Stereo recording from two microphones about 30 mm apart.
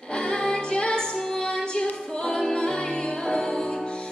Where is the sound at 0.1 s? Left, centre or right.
Left.